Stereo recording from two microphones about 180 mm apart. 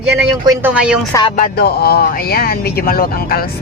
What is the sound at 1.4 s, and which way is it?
Speech, 60° left (ahead or behind).